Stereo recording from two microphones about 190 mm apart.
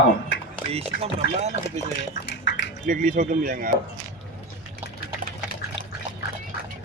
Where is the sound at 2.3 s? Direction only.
65° left (ahead or behind).